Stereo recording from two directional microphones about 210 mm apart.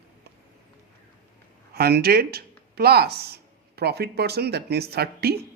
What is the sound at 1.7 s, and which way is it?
Speech, 50° right (ahead or behind).